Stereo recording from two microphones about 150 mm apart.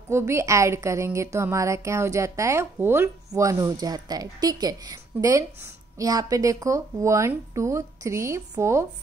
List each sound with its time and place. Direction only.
0.1 s speech: 20° right (ahead or behind)